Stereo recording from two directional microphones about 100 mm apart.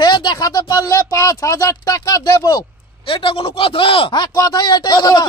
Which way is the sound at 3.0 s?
60° left (ahead or behind).